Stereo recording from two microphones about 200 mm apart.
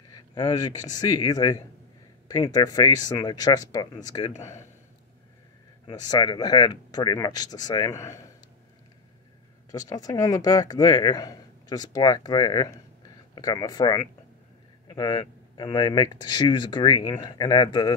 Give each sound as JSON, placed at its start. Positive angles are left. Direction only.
{"t": 0.1, "sound": "a man's voice", "side_deg": 20}
{"t": 5.9, "sound": "speech", "side_deg": 20}
{"t": 9.7, "sound": "speech", "side_deg": 20}